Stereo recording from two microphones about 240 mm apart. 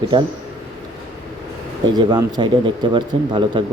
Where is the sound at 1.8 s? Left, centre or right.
Centre.